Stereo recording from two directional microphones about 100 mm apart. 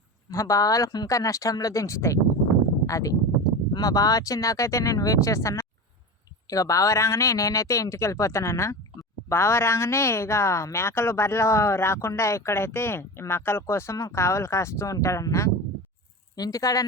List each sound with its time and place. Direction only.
0.3 s speech: 30° left (ahead or behind)